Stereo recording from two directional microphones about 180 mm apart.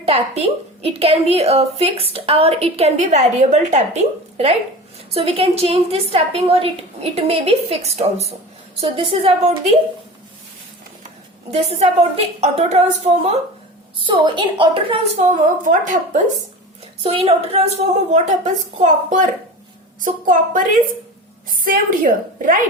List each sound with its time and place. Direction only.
0.0 s a woman's voice: 35° right (ahead or behind)
11.7 s a woman's voice: 35° right (ahead or behind)
15.2 s a woman's voice: 45° right (ahead or behind)
17.0 s a woman's voice: 30° right (ahead or behind); by 22.6 s 50° right (ahead or behind)